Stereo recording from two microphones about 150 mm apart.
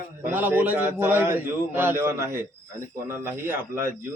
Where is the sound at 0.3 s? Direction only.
15° right (ahead or behind).